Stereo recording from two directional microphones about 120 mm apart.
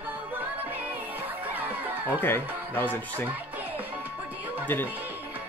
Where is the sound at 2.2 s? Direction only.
20° left (ahead or behind).